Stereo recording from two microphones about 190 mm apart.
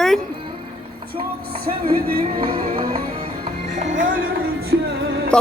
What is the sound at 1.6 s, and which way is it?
Music, 50° right (ahead or behind).